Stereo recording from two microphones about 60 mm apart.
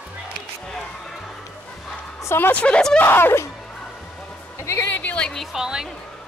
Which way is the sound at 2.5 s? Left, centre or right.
Centre.